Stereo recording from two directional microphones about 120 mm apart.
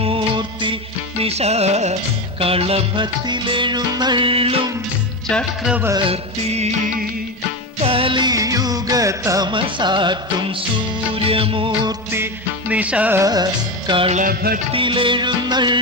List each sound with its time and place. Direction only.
0.0 s music: 45° right (ahead or behind)
1.2 s music: 60° right (ahead or behind)
2.4 s music: 55° right (ahead or behind)
5.3 s music: 10° left (ahead or behind)
6.1 s music: 65° right (ahead or behind)
7.8 s music: 50° right (ahead or behind); by 9.5 s 25° right (ahead or behind)
9.5 s music: 45° right (ahead or behind)
12.1 s music: 15° right (ahead or behind)
13.2 s music: 35° right (ahead or behind)